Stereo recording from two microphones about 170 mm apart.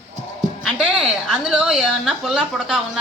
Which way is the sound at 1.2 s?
5° right (ahead or behind).